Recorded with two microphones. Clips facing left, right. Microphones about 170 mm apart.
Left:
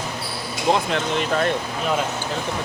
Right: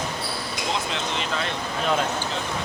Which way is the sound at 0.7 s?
50° left (ahead or behind).